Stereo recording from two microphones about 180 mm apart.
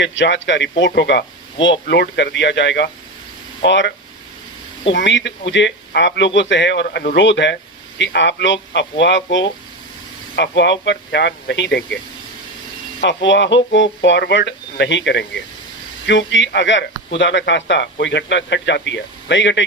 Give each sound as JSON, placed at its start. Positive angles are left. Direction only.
{"t": 0.0, "sound": "speech", "side_deg": 90}
{"t": 4.9, "sound": "speech", "side_deg": 90}
{"t": 10.3, "sound": "speech", "side_deg": 75}
{"t": 13.0, "sound": "speech", "side_deg": 80}
{"t": 16.0, "sound": "speech", "side_deg": 90}